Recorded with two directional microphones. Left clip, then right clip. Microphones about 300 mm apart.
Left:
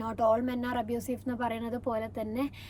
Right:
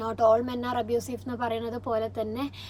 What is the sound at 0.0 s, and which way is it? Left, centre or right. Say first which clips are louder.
Speech: right 5 dB; centre.